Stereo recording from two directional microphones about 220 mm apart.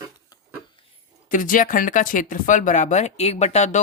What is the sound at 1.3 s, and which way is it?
Speech, 40° left (ahead or behind).